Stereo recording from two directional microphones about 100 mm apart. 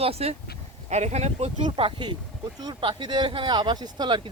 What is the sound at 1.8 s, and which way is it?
Speech, 75° right (ahead or behind).